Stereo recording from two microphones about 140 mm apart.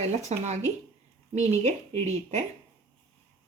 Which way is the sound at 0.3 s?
50° right (ahead or behind).